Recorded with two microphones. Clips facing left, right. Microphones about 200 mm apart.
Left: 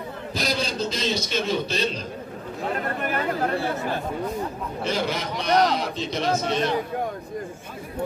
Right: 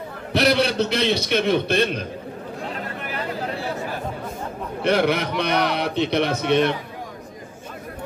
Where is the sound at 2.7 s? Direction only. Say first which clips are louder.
Left 8 dB; 50° left (ahead or behind).